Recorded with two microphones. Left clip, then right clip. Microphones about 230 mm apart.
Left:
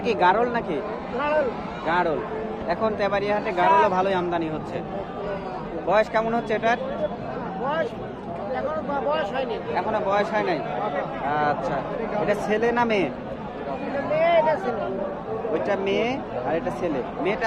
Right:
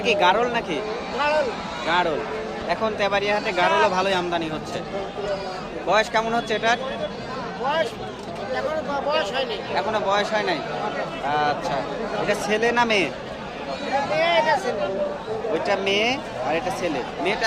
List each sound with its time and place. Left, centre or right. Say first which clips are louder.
0.0 s speech: right 1 dB; centre
1.9 s speech: right 1 dB; centre
5.9 s speech: right 1 dB; centre
9.0 s speech: right 2 dB; centre
9.7 s speech: right 1 dB; centre
14.2 s speech: left 2 dB; right
15.6 s speech: right 3 dB; centre